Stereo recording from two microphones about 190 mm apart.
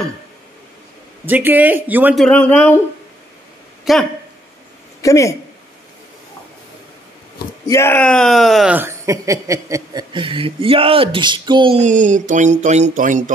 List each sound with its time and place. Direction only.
1.2 s speech: 10° right (ahead or behind)
2.2 s speech: 5° left (ahead or behind)
3.9 s speech: centre (ahead or behind)
5.0 s speech: 15° left (ahead or behind)
7.7 s speech: 10° left (ahead or behind); by 11.8 s 25° right (ahead or behind)
11.8 s a sound: 40° right (ahead or behind)